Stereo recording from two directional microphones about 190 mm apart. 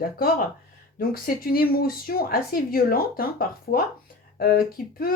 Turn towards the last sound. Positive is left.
turn(degrees=50)  # may be behind; listen again after turning